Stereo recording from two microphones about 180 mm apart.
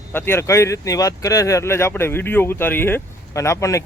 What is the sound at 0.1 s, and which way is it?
Speech, 10° left (ahead or behind).